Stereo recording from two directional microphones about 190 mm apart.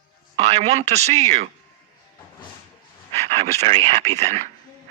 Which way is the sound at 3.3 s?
35° right (ahead or behind).